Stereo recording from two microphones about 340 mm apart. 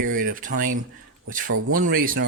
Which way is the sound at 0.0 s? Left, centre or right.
Right.